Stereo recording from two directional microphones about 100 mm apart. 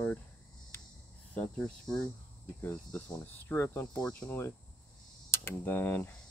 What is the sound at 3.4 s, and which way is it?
Speech, 20° left (ahead or behind).